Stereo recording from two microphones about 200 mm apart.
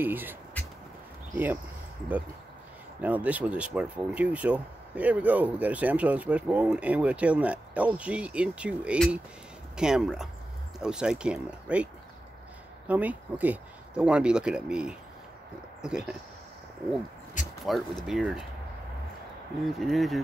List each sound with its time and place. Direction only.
0.0 s speech: 10° right (ahead or behind)
3.0 s speech: 5° right (ahead or behind)
17.4 s a sound: 40° left (ahead or behind)
18.0 s speech: 5° right (ahead or behind)
19.6 s speech: centre (ahead or behind)